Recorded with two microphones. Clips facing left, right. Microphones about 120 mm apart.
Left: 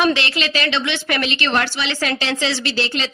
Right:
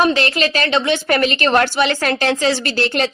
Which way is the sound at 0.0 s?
40° right (ahead or behind).